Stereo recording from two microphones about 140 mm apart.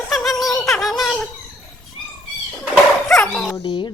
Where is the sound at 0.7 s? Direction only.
Centre (ahead or behind).